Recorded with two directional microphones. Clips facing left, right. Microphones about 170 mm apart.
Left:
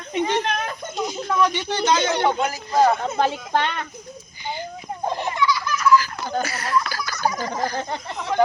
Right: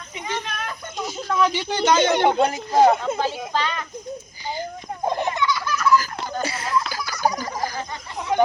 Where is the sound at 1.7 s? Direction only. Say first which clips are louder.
Right 2 dB; 20° right (ahead or behind).